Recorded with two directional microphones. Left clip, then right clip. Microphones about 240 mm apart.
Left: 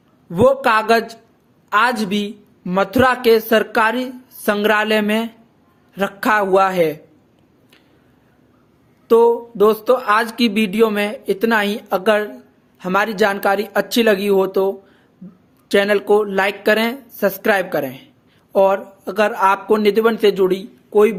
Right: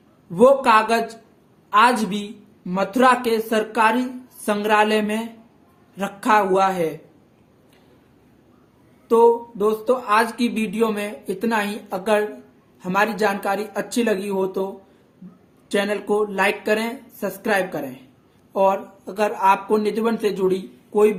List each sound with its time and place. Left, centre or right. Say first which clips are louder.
0.3 s speech: even; left
9.0 s speech: left 3 dB; left
15.7 s speech: left 7 dB; left